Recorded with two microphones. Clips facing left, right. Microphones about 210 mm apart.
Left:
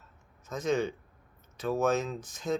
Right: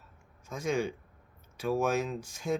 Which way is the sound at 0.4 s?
10° right (ahead or behind).